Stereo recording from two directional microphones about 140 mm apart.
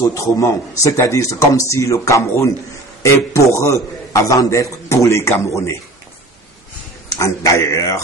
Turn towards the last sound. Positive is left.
turn(degrees=25)  # may be behind; listen again after turning